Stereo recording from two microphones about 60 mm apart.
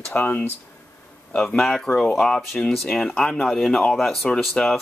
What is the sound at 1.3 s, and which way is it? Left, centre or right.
Speech, centre.